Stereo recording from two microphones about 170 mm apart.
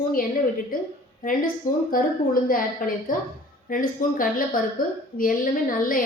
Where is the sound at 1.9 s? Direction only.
55° left (ahead or behind).